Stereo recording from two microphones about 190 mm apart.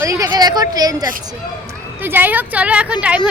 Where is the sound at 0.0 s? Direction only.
15° right (ahead or behind).